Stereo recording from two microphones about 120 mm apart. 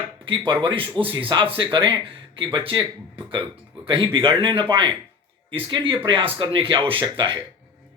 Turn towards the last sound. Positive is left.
turn(degrees=-45)  # may be behind; listen again after turning